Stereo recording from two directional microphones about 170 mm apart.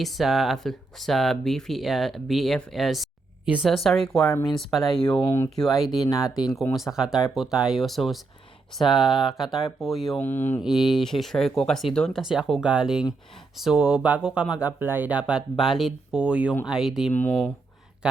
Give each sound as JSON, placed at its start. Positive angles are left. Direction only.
{"t": 0.0, "sound": "speech", "side_deg": 0}
{"t": 10.2, "sound": "speech", "side_deg": 10}
{"t": 10.6, "sound": "speech", "side_deg": 0}
{"t": 17.1, "sound": "speech", "side_deg": 10}
{"t": 18.0, "sound": "a sound", "side_deg": -5}